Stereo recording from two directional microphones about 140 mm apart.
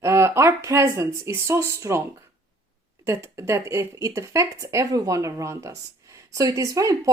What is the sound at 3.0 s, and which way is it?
Speech, 20° right (ahead or behind).